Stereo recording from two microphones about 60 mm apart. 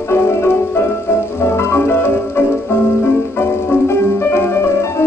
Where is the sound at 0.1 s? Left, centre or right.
Left.